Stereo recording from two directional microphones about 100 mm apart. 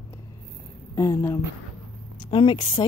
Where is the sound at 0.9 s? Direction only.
30° left (ahead or behind).